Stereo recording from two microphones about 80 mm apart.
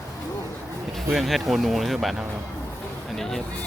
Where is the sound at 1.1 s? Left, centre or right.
Centre.